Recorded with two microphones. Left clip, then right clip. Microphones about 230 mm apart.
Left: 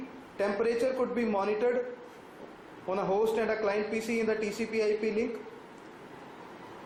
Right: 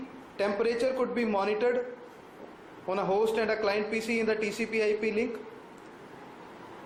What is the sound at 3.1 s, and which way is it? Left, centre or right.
Speech, right.